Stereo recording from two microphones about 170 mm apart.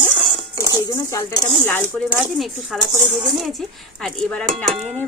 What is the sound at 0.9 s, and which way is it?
Speech, 20° left (ahead or behind).